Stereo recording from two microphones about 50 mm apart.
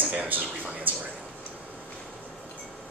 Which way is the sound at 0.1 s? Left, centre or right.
Right.